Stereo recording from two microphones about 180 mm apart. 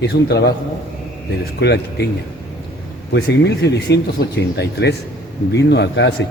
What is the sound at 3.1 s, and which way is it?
Speech, 70° left (ahead or behind).